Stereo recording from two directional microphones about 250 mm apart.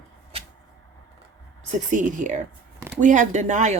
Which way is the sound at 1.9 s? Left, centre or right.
Right.